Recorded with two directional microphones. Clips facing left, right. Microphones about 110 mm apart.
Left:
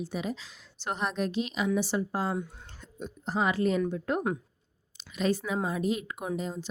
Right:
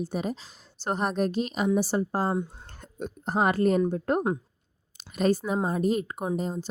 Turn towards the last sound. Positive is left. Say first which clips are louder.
# right 4 dB
turn(degrees=-40)  # may be behind; listen again after turning